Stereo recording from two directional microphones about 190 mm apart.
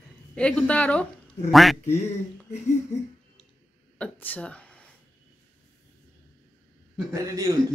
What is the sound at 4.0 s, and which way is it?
Speech, 10° left (ahead or behind).